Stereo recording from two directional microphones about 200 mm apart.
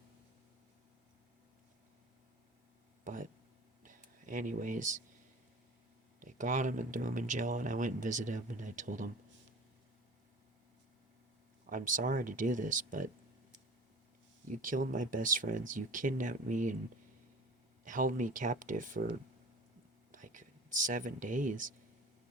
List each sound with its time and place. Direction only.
3.0 s a sound: 40° right (ahead or behind)
3.8 s speech: 40° right (ahead or behind)
6.1 s speech: 40° right (ahead or behind)
11.6 s speech: 40° right (ahead or behind)
14.5 s speech: 40° right (ahead or behind)
17.8 s speech: 40° right (ahead or behind)
20.1 s whispering: 40° right (ahead or behind)